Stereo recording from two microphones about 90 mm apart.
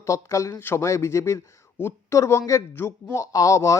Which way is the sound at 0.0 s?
35° left (ahead or behind).